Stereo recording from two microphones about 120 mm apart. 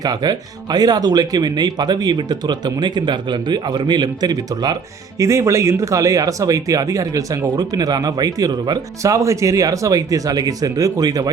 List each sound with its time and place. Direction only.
0.0 s speech: 35° right (ahead or behind)